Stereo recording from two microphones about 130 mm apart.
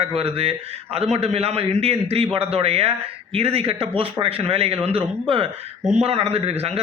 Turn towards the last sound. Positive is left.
turn(degrees=-50)  # may be behind; listen again after turning